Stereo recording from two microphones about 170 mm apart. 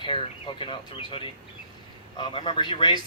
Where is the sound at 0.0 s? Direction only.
30° left (ahead or behind).